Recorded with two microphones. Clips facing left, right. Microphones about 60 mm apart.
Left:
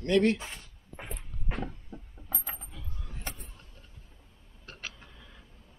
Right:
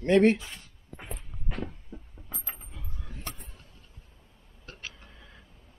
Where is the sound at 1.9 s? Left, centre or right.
Centre.